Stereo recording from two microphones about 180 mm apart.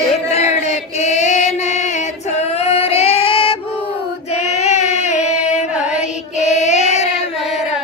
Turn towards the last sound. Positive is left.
turn(degrees=40)  # may be behind; listen again after turning